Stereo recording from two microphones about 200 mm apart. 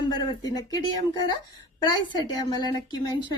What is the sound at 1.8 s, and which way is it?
A woman's voice, 20° left (ahead or behind).